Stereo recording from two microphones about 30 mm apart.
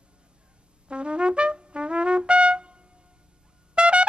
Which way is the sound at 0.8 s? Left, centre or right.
Right.